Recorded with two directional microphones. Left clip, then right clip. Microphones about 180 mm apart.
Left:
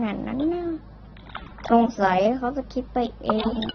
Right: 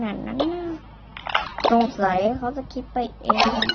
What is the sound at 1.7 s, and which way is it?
A woman's voice, 10° left (ahead or behind).